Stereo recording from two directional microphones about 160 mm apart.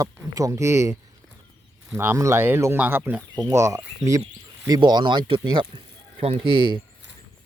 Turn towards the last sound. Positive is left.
turn(degrees=-30)  # may be behind; listen again after turning